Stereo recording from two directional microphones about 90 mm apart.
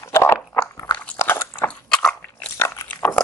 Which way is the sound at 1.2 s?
25° left (ahead or behind).